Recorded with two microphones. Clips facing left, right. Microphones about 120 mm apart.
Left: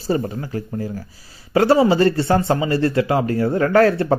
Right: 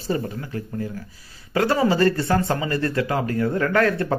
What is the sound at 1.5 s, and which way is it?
A man's voice, 30° left (ahead or behind).